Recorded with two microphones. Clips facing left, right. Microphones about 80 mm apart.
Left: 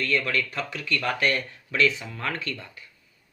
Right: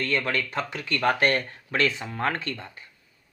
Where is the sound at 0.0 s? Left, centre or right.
Right.